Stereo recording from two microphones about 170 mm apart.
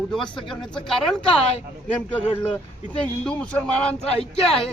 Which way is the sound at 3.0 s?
5° left (ahead or behind).